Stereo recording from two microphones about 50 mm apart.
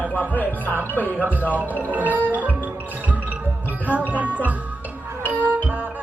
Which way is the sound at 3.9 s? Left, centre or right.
Right.